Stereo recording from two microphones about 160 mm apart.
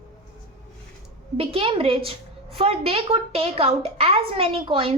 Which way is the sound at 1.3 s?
35° right (ahead or behind).